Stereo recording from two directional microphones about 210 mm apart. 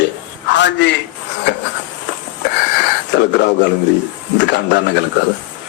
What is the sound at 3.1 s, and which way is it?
Speech, 55° left (ahead or behind).